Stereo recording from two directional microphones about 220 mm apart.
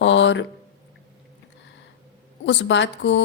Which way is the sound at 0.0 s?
55° left (ahead or behind).